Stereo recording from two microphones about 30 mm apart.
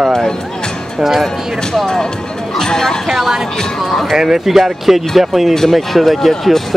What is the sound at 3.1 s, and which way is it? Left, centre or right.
Speech, centre.